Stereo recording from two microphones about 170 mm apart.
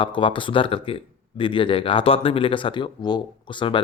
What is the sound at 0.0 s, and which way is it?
A man's voice, 30° left (ahead or behind).